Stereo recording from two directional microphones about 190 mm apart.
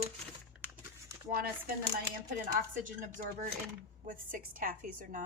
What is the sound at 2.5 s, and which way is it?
A woman's voice, 45° right (ahead or behind).